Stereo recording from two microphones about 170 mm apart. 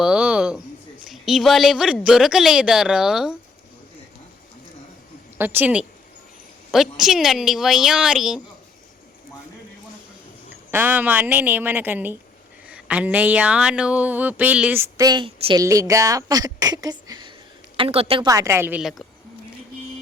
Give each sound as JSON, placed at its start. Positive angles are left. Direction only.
{"t": 0.0, "sound": "a sound", "side_deg": -5}
{"t": 1.0, "sound": "a woman's voice", "side_deg": 0}
{"t": 5.4, "sound": "a woman's voice", "side_deg": -10}
{"t": 10.7, "sound": "a woman's voice", "side_deg": -10}
{"t": 18.3, "sound": "speech", "side_deg": -20}